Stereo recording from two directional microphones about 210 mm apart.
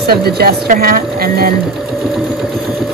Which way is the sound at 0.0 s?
50° right (ahead or behind).